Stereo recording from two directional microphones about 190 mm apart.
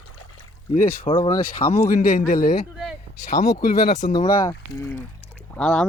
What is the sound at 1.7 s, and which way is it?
A man's voice, 45° left (ahead or behind).